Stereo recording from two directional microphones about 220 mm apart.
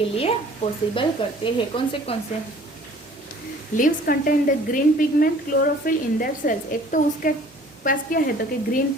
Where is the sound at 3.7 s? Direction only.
40° left (ahead or behind).